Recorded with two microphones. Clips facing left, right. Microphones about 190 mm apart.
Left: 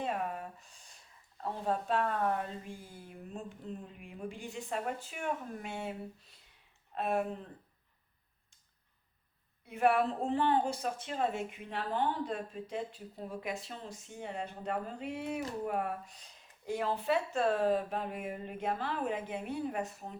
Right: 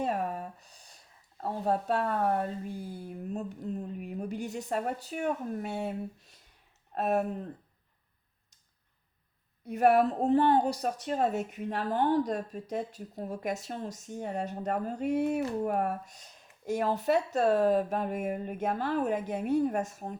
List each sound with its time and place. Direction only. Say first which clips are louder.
0.0 s a sound: right 4 dB; 40° right (ahead or behind)
1.4 s speech: right 4 dB; 40° right (ahead or behind)
9.6 s a woman's voice: right 5 dB; 40° right (ahead or behind)